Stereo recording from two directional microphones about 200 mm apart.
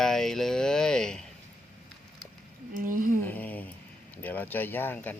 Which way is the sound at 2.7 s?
40° right (ahead or behind).